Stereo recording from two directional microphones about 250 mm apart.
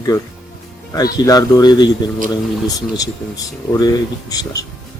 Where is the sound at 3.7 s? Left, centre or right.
Centre.